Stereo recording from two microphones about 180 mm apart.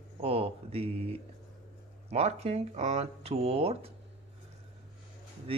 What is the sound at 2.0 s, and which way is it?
Speech, 35° right (ahead or behind).